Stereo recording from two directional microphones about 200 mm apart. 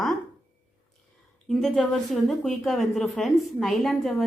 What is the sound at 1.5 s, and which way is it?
A woman's voice, centre (ahead or behind).